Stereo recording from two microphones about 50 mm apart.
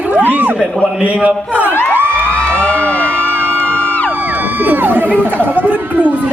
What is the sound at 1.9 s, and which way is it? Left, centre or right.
Crowd, right.